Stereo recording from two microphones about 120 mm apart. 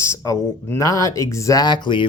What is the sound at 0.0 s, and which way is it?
Speech, 25° left (ahead or behind).